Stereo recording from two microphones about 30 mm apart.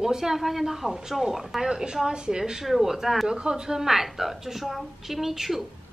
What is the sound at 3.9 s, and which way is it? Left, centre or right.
Speech, centre.